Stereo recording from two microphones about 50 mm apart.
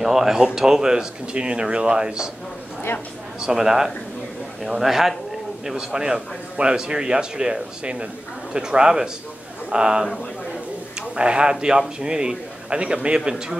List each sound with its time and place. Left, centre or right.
0.0 s speech: centre
3.3 s speech: centre